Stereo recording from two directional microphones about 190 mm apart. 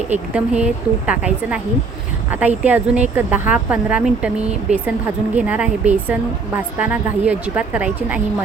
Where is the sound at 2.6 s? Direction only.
10° right (ahead or behind).